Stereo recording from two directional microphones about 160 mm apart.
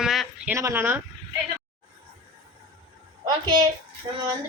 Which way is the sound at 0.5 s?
15° right (ahead or behind).